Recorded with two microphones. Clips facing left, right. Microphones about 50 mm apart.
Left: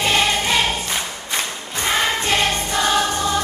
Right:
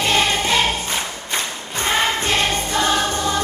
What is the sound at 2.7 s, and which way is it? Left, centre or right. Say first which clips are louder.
Music: even; left.